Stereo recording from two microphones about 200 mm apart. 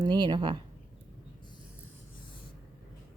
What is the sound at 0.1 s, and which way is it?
Speech, 20° right (ahead or behind).